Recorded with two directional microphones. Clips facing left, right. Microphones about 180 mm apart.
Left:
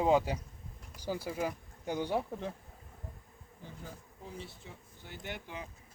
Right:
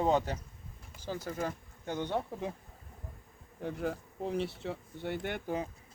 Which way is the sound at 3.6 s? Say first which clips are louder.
Right 13 dB; 70° right (ahead or behind).